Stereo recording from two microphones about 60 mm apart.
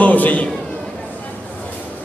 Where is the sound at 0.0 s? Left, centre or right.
Left.